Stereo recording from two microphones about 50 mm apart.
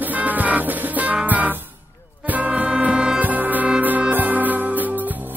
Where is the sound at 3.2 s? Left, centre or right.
Right.